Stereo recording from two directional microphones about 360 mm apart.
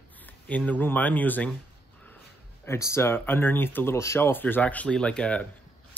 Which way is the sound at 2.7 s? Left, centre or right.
Centre.